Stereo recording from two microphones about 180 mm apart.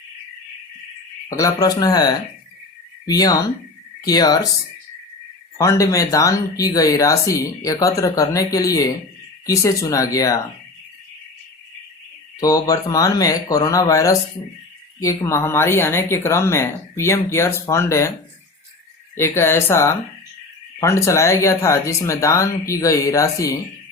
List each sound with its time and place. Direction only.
1.3 s speech: 20° left (ahead or behind)
5.5 s speech: 20° left (ahead or behind)
12.4 s speech: 20° left (ahead or behind)
19.1 s speech: 15° left (ahead or behind)